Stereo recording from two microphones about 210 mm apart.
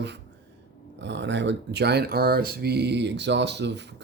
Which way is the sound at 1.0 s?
55° right (ahead or behind).